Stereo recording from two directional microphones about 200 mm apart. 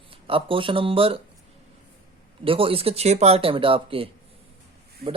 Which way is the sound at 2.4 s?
25° right (ahead or behind).